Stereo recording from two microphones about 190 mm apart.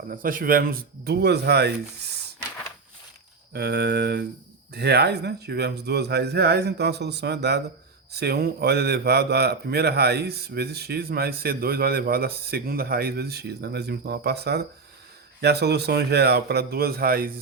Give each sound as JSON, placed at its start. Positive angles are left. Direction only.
{"t": 0.1, "sound": "speech", "side_deg": -45}
{"t": 3.5, "sound": "a man's voice", "side_deg": -60}